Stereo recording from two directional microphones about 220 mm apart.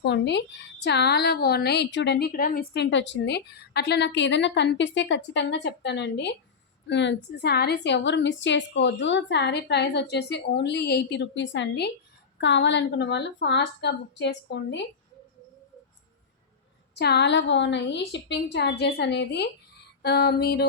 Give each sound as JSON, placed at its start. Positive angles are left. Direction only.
{"t": 0.0, "sound": "a woman's voice", "side_deg": 50}
{"t": 16.9, "sound": "a woman's voice", "side_deg": 50}